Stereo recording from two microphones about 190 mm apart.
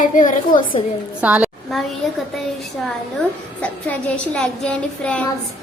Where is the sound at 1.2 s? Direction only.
5° right (ahead or behind).